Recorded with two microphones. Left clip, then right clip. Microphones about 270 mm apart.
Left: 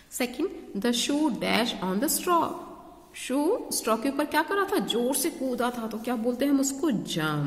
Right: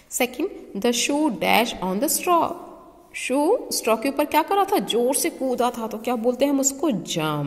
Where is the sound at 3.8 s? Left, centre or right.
Centre.